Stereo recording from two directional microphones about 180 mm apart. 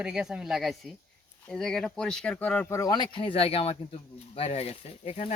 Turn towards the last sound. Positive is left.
turn(degrees=40)  # may be behind; listen again after turning